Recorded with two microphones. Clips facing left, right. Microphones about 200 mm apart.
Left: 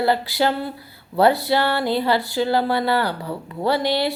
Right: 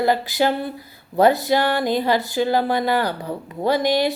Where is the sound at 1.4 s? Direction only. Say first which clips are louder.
Right 1 dB; 15° right (ahead or behind).